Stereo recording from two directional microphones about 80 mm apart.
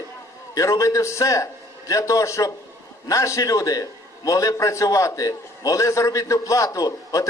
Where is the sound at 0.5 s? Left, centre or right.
Left.